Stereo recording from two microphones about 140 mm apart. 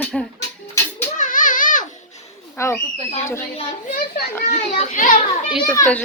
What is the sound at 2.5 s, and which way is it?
Speech, 20° left (ahead or behind).